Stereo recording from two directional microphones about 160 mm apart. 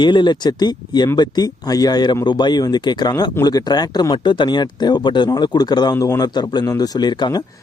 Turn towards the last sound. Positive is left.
turn(degrees=30)  # may be behind; listen again after turning